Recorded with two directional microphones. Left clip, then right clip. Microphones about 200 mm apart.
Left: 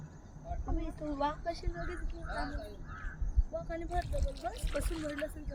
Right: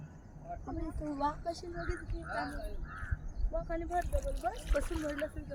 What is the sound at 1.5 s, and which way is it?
Speech, 20° right (ahead or behind).